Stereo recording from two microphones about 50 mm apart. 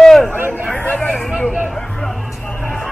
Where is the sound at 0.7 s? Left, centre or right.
Left.